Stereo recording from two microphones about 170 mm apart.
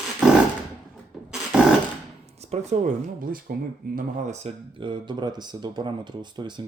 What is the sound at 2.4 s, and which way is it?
Speech, 40° right (ahead or behind).